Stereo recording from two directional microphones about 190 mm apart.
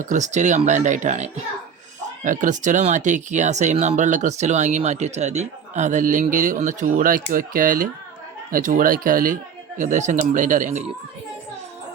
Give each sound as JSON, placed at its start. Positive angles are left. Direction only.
{"t": 0.0, "sound": "speech", "side_deg": -40}